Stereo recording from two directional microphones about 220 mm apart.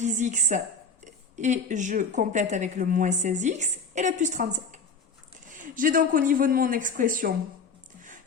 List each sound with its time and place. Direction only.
0.0 s a woman's voice: 35° right (ahead or behind)